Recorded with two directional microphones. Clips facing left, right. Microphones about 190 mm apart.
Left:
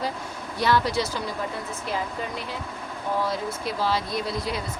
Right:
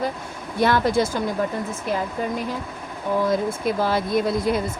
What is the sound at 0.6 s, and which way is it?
Speech, 50° right (ahead or behind).